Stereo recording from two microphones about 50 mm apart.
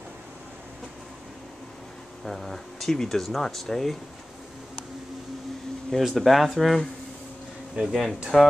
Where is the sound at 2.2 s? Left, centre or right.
Centre.